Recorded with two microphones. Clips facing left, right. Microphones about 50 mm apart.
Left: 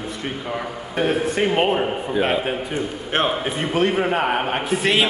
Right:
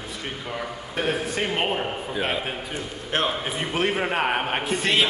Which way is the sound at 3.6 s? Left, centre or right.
Centre.